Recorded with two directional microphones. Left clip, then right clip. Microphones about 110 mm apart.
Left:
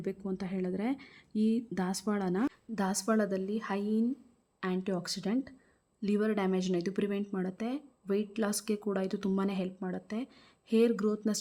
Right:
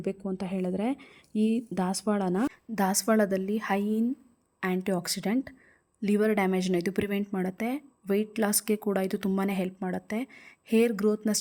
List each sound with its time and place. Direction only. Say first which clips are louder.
0.0 s speech: right 4 dB; 40° right (ahead or behind)